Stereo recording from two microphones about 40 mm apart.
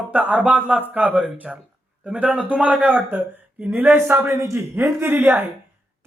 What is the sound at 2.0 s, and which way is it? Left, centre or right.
A woman's voice, right.